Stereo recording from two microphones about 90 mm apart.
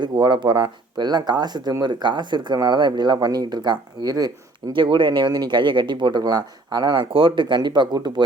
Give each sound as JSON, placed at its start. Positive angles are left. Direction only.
{"t": 0.0, "sound": "speech", "side_deg": -55}
{"t": 4.7, "sound": "speech", "side_deg": -65}